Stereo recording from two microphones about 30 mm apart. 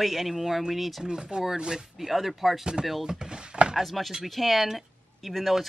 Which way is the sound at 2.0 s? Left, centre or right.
Centre.